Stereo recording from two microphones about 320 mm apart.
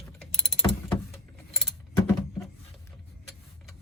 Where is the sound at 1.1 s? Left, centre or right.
Centre.